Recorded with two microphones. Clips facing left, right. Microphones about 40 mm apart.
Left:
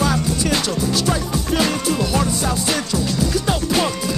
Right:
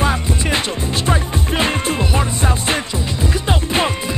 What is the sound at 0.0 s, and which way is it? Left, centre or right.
Music, right.